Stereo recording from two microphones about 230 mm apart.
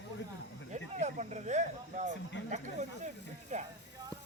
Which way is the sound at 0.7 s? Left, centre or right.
Right.